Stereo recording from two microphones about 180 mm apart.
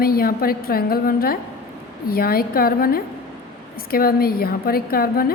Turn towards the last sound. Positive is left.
turn(degrees=55)  # may be behind; listen again after turning